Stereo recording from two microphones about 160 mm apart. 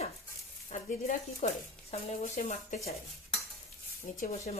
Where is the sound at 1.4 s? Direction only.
40° left (ahead or behind).